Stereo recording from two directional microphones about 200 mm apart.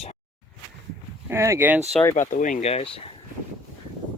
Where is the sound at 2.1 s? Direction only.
40° left (ahead or behind).